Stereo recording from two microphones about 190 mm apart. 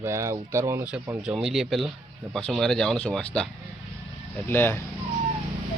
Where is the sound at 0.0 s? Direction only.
15° right (ahead or behind).